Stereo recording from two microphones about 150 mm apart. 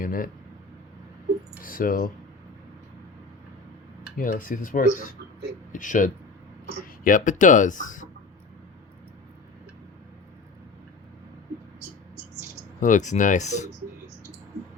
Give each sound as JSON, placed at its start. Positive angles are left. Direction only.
{"t": 0.0, "sound": "speech", "side_deg": 70}
{"t": 1.6, "sound": "speech", "side_deg": 70}
{"t": 4.2, "sound": "speech", "side_deg": 65}
{"t": 12.8, "sound": "speech", "side_deg": 55}